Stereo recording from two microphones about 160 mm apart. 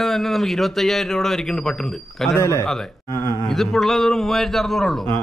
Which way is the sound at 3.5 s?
Centre (ahead or behind).